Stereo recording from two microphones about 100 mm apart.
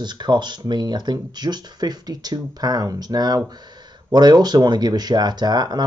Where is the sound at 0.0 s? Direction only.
45° right (ahead or behind).